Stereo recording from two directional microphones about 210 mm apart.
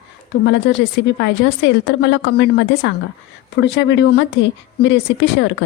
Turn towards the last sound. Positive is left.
turn(degrees=55)  # may be behind; listen again after turning